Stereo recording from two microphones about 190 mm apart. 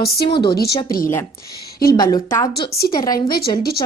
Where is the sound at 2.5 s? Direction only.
55° left (ahead or behind).